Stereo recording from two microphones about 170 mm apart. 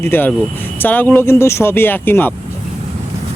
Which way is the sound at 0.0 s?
10° left (ahead or behind).